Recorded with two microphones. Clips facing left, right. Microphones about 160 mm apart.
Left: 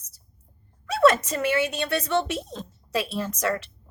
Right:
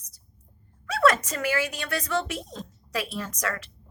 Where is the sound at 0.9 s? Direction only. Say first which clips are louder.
Left 3 dB; 25° left (ahead or behind).